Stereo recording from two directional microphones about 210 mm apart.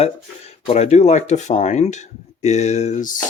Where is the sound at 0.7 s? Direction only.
30° left (ahead or behind).